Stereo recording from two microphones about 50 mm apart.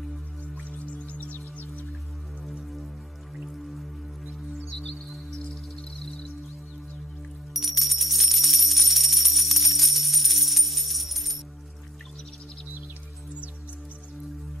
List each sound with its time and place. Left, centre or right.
0.6 s music: left
3.4 s music: centre
4.6 s music: centre
5.3 s cricket: centre
7.5 s music: centre